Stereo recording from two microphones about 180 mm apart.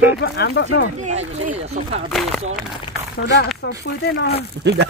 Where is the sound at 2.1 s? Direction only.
Centre (ahead or behind).